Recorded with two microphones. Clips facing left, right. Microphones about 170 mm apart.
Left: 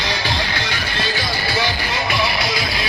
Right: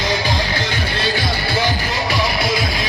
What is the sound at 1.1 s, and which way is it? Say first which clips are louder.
Music: right 2 dB; 50° right (ahead or behind).